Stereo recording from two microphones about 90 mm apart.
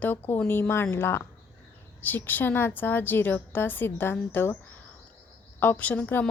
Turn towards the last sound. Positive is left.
turn(degrees=20)  # may be behind; listen again after turning